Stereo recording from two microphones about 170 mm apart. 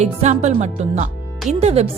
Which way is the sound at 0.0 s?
45° right (ahead or behind).